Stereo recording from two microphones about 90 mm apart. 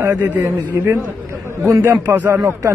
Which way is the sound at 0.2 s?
20° right (ahead or behind).